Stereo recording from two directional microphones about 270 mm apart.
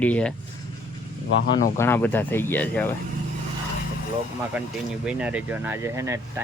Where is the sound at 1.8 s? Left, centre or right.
Centre.